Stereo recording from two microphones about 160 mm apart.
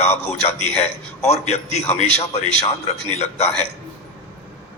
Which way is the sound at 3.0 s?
45° left (ahead or behind).